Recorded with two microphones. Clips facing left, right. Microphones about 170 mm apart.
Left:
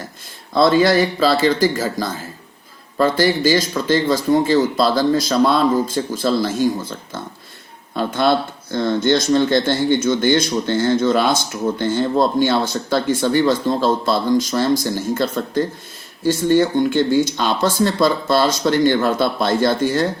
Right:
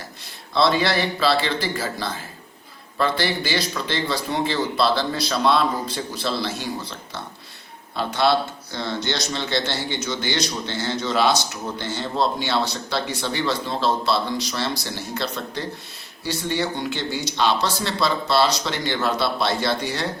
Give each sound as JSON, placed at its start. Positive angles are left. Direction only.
{"t": 0.5, "sound": "speech", "side_deg": 45}